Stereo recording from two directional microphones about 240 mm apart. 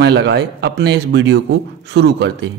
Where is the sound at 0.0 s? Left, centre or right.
Right.